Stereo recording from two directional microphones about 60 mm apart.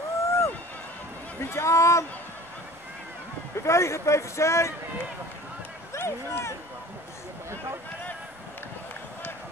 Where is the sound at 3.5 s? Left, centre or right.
Left.